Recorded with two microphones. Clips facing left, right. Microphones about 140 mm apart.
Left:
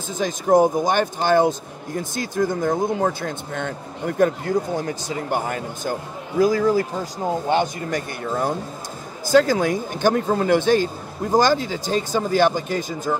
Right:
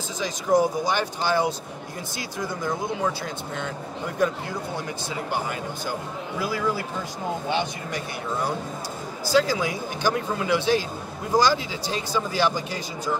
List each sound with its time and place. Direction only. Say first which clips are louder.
0.2 s speech: left 5 dB; 50° left (ahead or behind)